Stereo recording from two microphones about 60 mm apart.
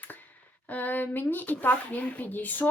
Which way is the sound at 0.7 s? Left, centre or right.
Left.